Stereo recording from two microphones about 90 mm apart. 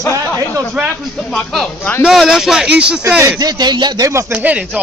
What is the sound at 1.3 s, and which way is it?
Speech, 5° left (ahead or behind).